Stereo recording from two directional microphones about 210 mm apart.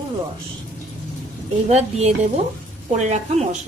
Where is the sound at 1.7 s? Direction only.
30° right (ahead or behind).